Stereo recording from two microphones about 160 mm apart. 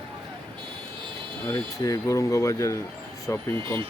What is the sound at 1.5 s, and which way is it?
Speech, 20° left (ahead or behind).